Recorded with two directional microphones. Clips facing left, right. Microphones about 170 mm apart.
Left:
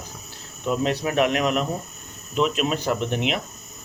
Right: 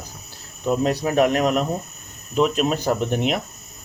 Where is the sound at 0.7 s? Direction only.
40° right (ahead or behind).